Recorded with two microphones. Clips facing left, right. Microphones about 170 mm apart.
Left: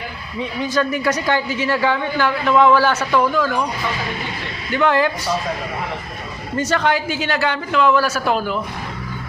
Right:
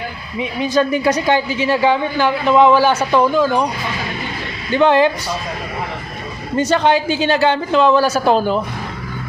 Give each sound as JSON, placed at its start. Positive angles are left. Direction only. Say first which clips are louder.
{"t": 0.3, "sound": "a woman's voice", "louder": "right 4 dB", "side_deg": -20}
{"t": 4.7, "sound": "a woman's voice", "louder": "right 4 dB", "side_deg": -25}
{"t": 6.6, "sound": "a woman's voice", "louder": "right 4 dB", "side_deg": -25}